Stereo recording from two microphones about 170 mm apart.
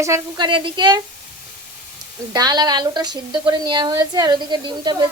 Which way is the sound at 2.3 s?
25° right (ahead or behind).